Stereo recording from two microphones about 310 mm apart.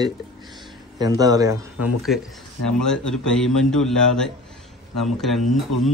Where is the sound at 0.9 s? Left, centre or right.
Centre.